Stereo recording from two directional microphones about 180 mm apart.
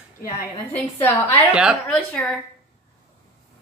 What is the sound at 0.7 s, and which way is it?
A woman's voice, 10° left (ahead or behind).